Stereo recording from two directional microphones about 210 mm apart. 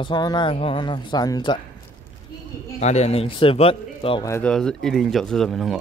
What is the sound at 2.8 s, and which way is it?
Speech, 30° left (ahead or behind).